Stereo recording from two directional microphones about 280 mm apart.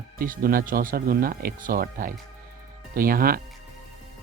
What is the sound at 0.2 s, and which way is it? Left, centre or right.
Speech, right.